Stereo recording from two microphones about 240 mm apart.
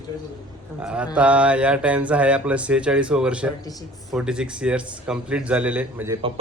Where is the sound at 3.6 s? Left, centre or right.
Centre.